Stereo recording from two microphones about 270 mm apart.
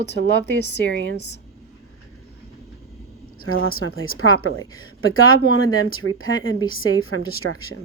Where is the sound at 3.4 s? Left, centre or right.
Left.